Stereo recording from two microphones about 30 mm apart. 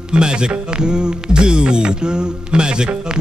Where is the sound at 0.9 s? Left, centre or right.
Right.